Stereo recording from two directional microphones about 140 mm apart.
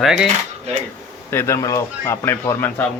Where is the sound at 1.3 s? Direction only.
20° left (ahead or behind).